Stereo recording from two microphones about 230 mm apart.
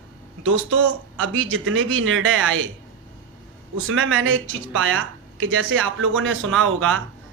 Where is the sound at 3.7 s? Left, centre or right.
Right.